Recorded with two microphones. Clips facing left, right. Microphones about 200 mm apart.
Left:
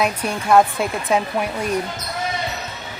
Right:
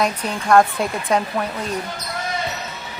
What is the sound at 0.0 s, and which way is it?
Speech, 5° left (ahead or behind).